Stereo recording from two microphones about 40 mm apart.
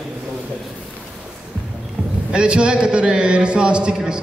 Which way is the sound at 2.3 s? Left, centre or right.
Right.